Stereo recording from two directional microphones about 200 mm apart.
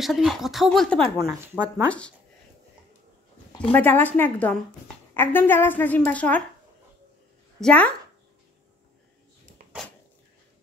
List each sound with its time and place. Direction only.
0.0 s a woman's voice: centre (ahead or behind)
1.1 s speech: 15° right (ahead or behind)
1.9 s a woman's voice: 5° left (ahead or behind)
3.7 s a woman's voice: 10° left (ahead or behind)
7.6 s a woman's voice: 5° left (ahead or behind)